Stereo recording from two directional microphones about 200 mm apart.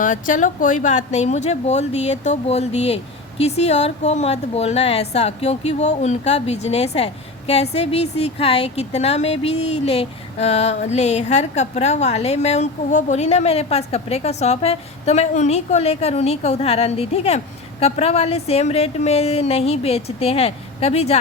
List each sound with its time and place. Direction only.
0.0 s speech: 40° left (ahead or behind)